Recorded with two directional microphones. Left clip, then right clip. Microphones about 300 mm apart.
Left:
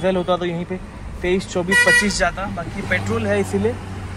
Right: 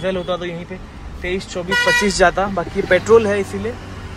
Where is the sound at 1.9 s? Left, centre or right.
Centre.